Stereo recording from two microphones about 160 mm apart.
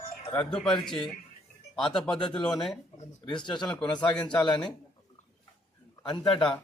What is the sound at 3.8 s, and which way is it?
Speech, 5° left (ahead or behind).